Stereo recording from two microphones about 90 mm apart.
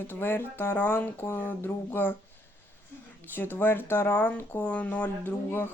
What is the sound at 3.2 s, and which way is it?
Speech, 20° left (ahead or behind).